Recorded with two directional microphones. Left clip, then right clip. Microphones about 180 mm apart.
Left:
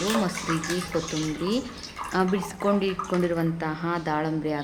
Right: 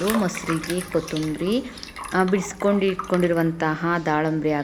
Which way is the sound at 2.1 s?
15° right (ahead or behind).